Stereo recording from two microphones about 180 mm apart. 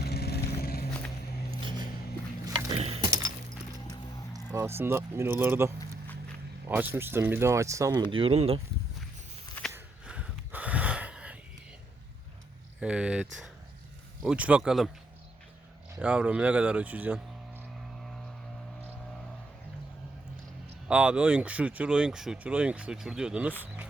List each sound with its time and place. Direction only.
0.0 s vehicle: 60° left (ahead or behind)
1.6 s music: 25° right (ahead or behind)
2.4 s a sound: 20° right (ahead or behind)
2.7 s a sound: 35° right (ahead or behind)
3.0 s music: 20° right (ahead or behind)
4.5 s speech: 15° right (ahead or behind)
8.1 s speech: 30° right (ahead or behind)
9.7 s wheeze: 5° right (ahead or behind)
12.8 s speech: 5° right (ahead or behind)
16.0 s speech: 5° right (ahead or behind)
17.9 s vehicle: centre (ahead or behind)
20.8 s speech: 5° right (ahead or behind)